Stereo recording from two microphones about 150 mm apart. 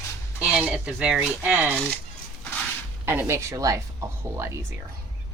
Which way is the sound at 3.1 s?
15° right (ahead or behind).